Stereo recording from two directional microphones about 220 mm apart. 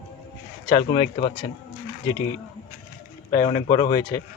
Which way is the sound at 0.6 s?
20° left (ahead or behind).